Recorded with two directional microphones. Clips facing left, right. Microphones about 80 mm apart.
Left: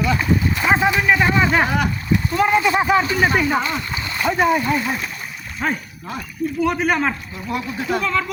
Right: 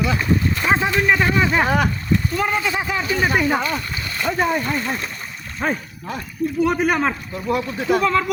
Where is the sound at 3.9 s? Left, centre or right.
Left.